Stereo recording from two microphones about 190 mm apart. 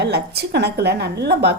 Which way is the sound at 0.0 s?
60° right (ahead or behind).